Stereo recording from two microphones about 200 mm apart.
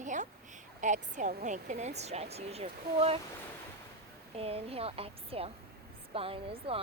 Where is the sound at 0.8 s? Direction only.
40° right (ahead or behind).